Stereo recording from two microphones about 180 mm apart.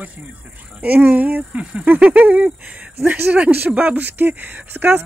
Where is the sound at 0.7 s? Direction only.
10° right (ahead or behind).